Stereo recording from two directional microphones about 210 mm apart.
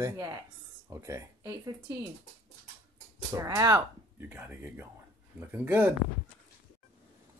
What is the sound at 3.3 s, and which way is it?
Speech, 15° right (ahead or behind).